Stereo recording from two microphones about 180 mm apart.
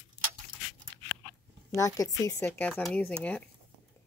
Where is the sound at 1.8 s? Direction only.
20° left (ahead or behind).